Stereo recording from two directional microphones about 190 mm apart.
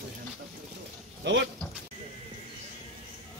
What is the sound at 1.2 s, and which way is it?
Speech, 70° right (ahead or behind).